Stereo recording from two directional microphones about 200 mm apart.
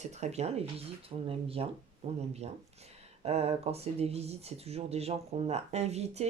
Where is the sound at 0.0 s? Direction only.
35° right (ahead or behind).